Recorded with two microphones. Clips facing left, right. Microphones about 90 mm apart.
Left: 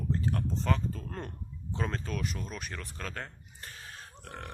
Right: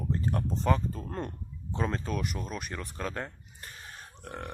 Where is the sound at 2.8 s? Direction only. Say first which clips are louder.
Right 5 dB; 15° right (ahead or behind).